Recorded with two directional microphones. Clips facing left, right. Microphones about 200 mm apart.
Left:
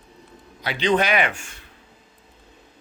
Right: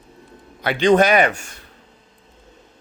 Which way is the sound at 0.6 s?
50° right (ahead or behind).